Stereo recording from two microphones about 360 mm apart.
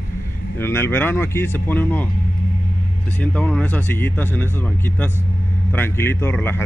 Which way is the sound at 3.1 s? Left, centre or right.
Centre.